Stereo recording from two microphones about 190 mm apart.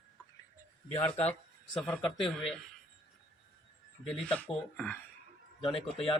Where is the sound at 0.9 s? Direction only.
35° left (ahead or behind).